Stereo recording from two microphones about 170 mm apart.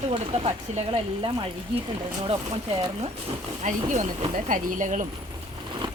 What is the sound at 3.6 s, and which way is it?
Speech, 45° right (ahead or behind).